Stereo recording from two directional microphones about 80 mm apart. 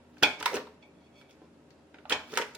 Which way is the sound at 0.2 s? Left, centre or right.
Centre.